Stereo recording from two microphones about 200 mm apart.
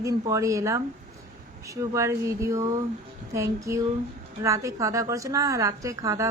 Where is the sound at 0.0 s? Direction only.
15° right (ahead or behind).